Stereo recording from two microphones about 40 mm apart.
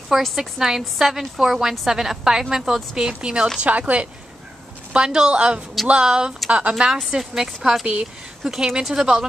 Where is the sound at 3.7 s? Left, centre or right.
Right.